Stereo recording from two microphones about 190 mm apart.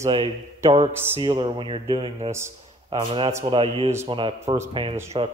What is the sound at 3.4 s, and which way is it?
Speech, 30° right (ahead or behind).